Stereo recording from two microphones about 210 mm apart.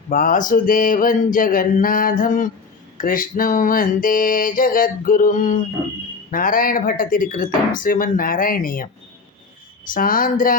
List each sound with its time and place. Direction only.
0.1 s mantra: 40° left (ahead or behind)
9.9 s mantra: 40° left (ahead or behind)